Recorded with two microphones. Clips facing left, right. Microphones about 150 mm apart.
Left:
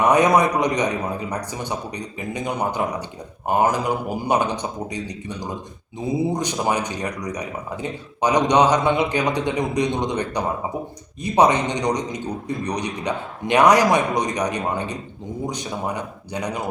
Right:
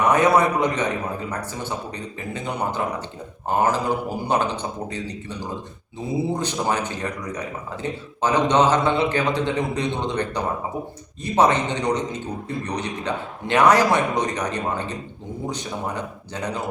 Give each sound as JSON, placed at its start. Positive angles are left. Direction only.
{"t": 0.1, "sound": "speech", "side_deg": 15}